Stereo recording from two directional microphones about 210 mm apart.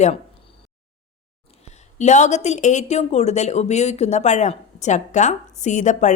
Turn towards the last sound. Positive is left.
turn(degrees=35)  # may be behind; listen again after turning